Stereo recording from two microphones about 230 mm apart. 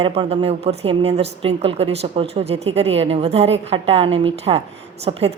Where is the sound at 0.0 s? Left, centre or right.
Right.